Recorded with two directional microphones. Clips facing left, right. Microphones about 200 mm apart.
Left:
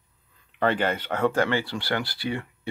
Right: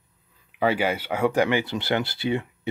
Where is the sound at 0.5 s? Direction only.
10° right (ahead or behind).